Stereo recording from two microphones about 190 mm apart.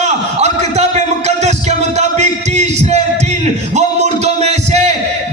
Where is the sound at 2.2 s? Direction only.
35° right (ahead or behind).